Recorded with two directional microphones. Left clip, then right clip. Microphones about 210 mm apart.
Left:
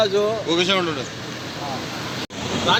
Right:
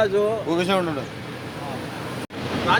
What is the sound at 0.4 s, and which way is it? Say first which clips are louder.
Speech: left 2 dB; 55° right (ahead or behind).